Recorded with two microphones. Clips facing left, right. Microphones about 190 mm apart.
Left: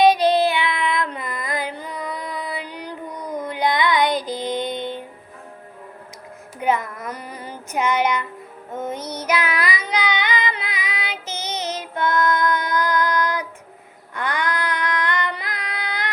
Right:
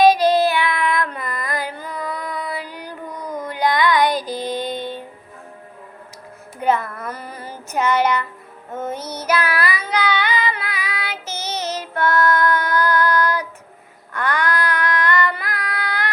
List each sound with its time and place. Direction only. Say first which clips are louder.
0.3 s child singing: right 2 dB; 20° left (ahead or behind)
3.4 s music: right 2 dB; 20° left (ahead or behind)
6.6 s child singing: right 2 dB; 15° left (ahead or behind)
14.1 s female singing: right 3 dB; 15° left (ahead or behind)